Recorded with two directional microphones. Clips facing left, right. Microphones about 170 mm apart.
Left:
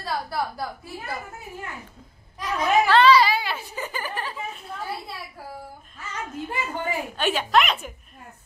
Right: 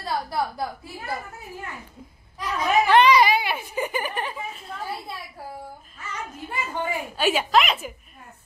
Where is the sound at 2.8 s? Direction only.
15° right (ahead or behind).